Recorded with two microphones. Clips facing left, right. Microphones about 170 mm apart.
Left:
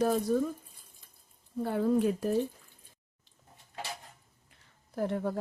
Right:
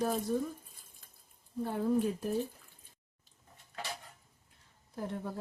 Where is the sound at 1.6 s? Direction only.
90° left.